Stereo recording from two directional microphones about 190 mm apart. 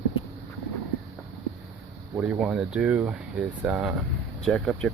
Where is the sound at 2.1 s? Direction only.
5° right (ahead or behind).